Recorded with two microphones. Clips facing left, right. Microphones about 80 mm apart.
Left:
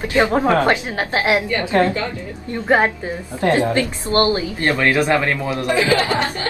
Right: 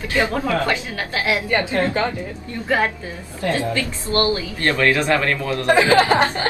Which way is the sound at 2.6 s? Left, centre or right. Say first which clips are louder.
Left 4 dB; left.